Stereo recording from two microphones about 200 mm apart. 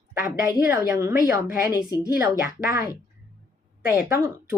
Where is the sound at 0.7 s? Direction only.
15° right (ahead or behind).